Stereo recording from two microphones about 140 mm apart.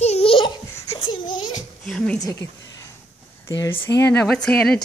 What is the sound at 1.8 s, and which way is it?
Speech, 5° left (ahead or behind).